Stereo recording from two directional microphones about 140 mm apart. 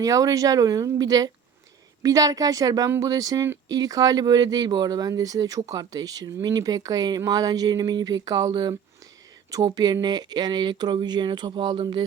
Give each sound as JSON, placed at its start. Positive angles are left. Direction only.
{"t": 0.0, "sound": "speech", "side_deg": -25}
{"t": 9.7, "sound": "speech", "side_deg": -30}